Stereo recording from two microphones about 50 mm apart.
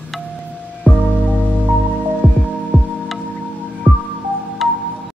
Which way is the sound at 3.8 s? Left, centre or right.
Right.